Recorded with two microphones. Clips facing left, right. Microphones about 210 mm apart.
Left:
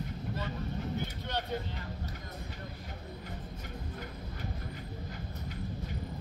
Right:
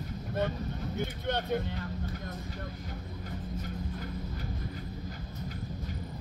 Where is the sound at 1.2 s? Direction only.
55° right (ahead or behind).